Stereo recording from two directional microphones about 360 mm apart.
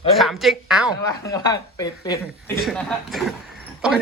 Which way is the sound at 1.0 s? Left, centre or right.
Centre.